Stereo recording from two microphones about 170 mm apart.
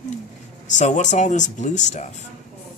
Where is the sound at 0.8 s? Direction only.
45° left (ahead or behind).